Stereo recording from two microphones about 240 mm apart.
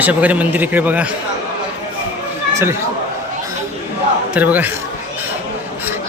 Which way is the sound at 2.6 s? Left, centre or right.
Centre.